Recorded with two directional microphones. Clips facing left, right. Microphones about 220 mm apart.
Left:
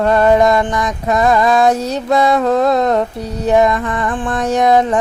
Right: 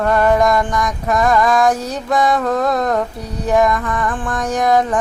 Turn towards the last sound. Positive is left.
turn(degrees=25)  # may be behind; listen again after turning